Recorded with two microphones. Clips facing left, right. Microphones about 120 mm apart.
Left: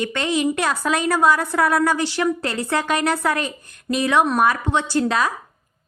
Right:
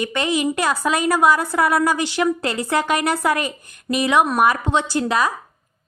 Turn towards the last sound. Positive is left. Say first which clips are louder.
# even
turn(degrees=-5)  # may be behind; listen again after turning